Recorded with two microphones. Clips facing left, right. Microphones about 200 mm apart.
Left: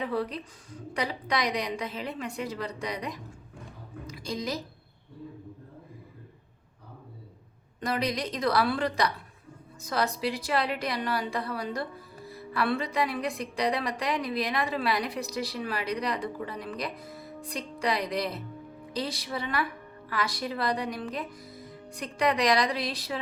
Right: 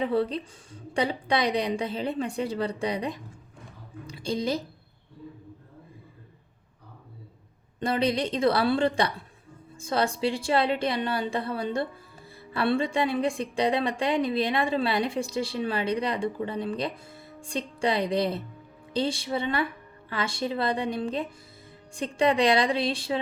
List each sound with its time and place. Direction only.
0.0 s a woman's voice: 30° right (ahead or behind)
4.0 s a sound: 30° right (ahead or behind)
7.8 s a woman's voice: 30° right (ahead or behind)